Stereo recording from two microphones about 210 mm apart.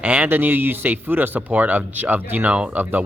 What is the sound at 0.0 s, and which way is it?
Speech, 5° right (ahead or behind).